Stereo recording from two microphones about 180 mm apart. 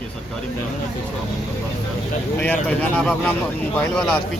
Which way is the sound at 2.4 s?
10° left (ahead or behind).